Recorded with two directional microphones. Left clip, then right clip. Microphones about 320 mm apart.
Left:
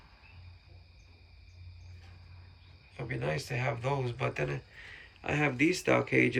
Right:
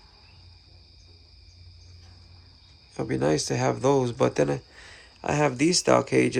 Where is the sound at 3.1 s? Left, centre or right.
Centre.